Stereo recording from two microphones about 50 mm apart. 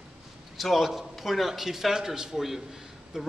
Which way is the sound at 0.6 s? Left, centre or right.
Centre.